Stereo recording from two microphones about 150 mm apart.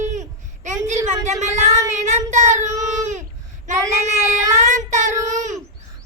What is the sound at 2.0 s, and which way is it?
Child singing, 55° right (ahead or behind).